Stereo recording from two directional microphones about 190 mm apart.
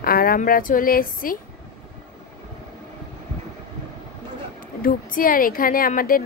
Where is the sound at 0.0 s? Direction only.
50° left (ahead or behind).